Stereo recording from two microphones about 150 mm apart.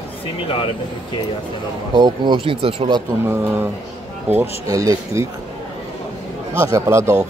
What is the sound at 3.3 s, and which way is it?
Speech, 15° right (ahead or behind).